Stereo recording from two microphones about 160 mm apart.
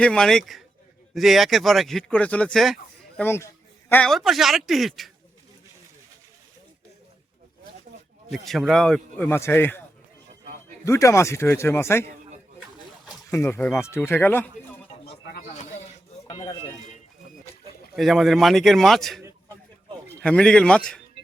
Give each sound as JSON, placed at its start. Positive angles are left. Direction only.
{"t": 0.0, "sound": "speech", "side_deg": 5}
{"t": 3.2, "sound": "a man's voice", "side_deg": 15}
{"t": 8.3, "sound": "a man's voice", "side_deg": 0}
{"t": 10.8, "sound": "a man's voice", "side_deg": 20}
{"t": 13.3, "sound": "a man's voice", "side_deg": 15}
{"t": 17.9, "sound": "speech", "side_deg": 0}